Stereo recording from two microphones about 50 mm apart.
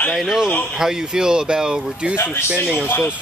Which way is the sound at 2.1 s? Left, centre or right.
Left.